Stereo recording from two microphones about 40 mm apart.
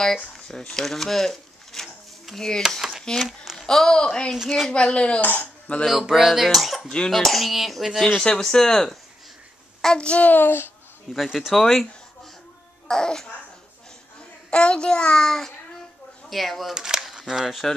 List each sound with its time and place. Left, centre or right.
0.0 s a child's voice: centre
5.2 s speech: left
5.9 s speech: centre
8.2 s speech: centre
9.9 s a child's voice: left
10.2 s a child's voice: left
11.1 s speech: centre
11.5 s speech: centre
14.5 s a child's voice: left
15.2 s speech: centre
16.7 s a sound: centre
17.3 s speech: centre